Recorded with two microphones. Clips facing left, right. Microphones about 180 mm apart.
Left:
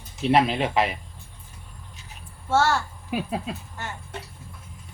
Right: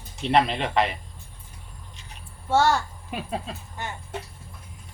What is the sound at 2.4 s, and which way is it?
Speech, 15° right (ahead or behind).